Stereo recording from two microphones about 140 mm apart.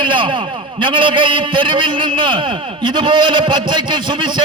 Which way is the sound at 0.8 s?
35° right (ahead or behind).